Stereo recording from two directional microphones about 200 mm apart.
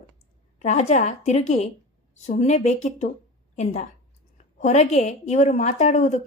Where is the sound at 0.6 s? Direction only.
35° left (ahead or behind).